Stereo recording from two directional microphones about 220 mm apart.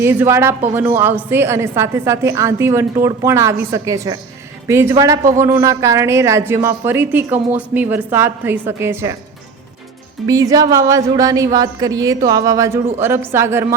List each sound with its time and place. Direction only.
0.0 s a woman's voice: 10° right (ahead or behind)
10.2 s a woman's voice: 15° right (ahead or behind)